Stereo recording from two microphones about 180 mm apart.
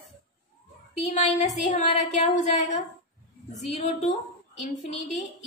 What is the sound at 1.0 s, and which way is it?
A woman's voice, 40° left (ahead or behind).